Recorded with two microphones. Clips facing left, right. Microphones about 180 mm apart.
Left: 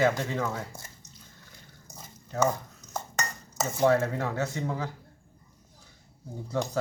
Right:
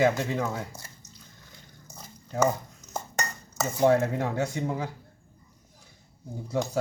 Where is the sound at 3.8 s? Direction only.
15° right (ahead or behind).